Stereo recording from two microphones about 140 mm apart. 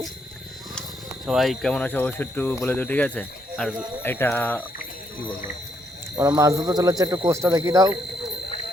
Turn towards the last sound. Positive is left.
turn(degrees=-25)  # may be behind; listen again after turning